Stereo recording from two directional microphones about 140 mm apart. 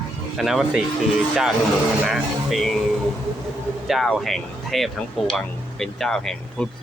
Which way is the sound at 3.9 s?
Centre (ahead or behind).